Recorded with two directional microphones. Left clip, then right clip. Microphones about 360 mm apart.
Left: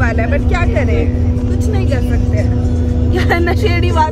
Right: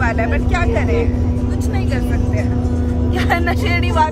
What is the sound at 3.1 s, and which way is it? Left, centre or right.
Speech, centre.